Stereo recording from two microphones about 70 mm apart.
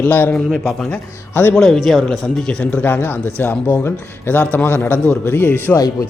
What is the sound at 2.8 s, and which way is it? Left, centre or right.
A man's voice, left.